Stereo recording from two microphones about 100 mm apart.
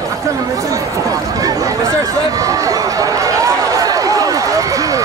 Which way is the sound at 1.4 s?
35° right (ahead or behind).